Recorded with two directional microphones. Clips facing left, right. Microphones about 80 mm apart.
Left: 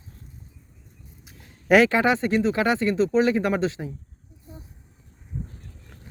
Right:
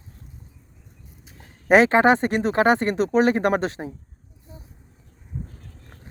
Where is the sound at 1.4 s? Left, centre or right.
Right.